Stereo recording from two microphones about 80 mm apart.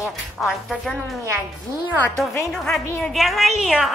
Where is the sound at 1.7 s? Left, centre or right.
Right.